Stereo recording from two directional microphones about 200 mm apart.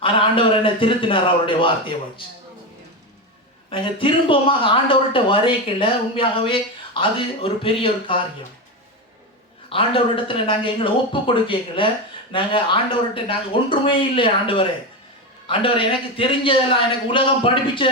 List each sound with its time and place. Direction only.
0.0 s speech: 25° left (ahead or behind)
3.7 s speech: 25° left (ahead or behind)
9.6 s speech: 25° left (ahead or behind)